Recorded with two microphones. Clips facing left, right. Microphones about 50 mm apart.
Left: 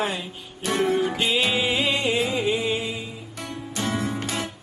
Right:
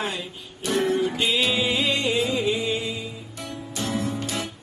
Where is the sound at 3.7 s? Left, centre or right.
Left.